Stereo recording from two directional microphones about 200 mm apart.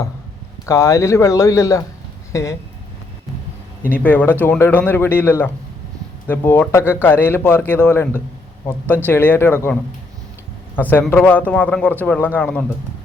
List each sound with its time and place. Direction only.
0.6 s a man's voice: 15° left (ahead or behind)
4.0 s a man's voice: 10° left (ahead or behind)
10.8 s a man's voice: 10° left (ahead or behind)